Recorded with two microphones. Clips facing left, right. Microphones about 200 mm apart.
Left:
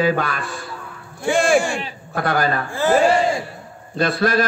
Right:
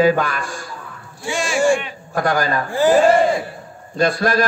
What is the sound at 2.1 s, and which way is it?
Speech, 45° right (ahead or behind).